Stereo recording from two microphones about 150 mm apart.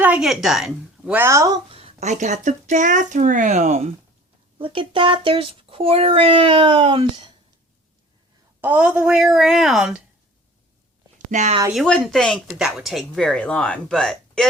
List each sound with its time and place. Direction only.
0.0 s a woman's voice: 5° right (ahead or behind)
1.7 s speech: 45° right (ahead or behind)
4.5 s a child's voice: 35° right (ahead or behind)
8.6 s speech: 10° right (ahead or behind)
11.3 s speech: 55° right (ahead or behind)
11.7 s speech: centre (ahead or behind)